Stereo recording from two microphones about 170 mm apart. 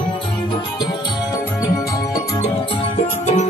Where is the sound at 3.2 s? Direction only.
45° left (ahead or behind).